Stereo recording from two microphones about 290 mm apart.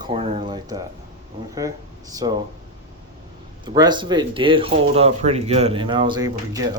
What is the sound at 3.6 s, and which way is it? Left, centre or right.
Speech, centre.